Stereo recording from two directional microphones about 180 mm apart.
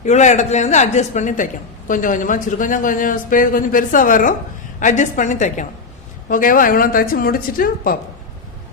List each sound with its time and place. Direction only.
0.0 s speech: 40° left (ahead or behind)